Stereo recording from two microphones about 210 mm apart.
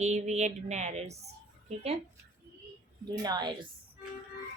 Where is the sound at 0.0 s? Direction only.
35° right (ahead or behind).